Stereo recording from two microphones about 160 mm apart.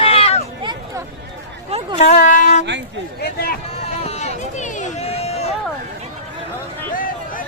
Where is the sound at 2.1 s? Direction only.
55° left (ahead or behind).